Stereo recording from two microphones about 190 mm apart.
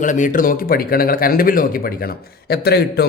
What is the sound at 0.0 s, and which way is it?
Speech, 40° left (ahead or behind).